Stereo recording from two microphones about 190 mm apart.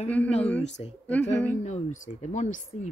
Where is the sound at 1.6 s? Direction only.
35° left (ahead or behind).